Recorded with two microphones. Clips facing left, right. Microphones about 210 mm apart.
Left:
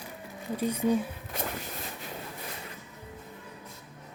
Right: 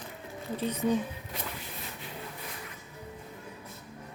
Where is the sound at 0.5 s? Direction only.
10° left (ahead or behind).